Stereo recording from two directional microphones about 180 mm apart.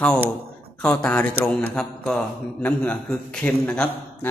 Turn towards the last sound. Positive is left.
turn(degrees=5)  # may be behind; listen again after turning